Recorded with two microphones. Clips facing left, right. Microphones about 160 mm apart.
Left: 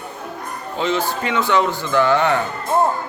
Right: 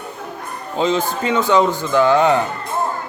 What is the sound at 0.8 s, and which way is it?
Speech, 20° right (ahead or behind).